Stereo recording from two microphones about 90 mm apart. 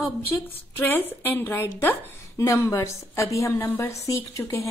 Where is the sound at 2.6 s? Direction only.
35° left (ahead or behind).